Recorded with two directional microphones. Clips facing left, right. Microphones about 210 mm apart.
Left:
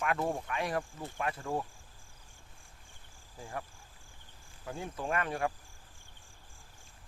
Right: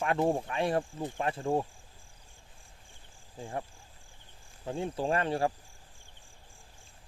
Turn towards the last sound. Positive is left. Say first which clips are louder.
# right 4 dB
turn(degrees=-30)  # may be behind; listen again after turning